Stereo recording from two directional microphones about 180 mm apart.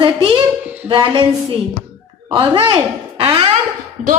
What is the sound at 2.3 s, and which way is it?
A woman's voice, 30° right (ahead or behind).